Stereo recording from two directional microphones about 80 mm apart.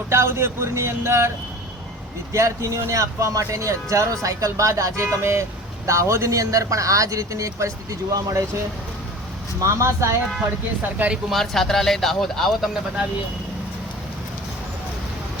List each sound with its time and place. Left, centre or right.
0.1 s a man's voice: right
2.3 s a man's voice: right
9.6 s a man's voice: right
10.9 s speech: centre
11.3 s speech: centre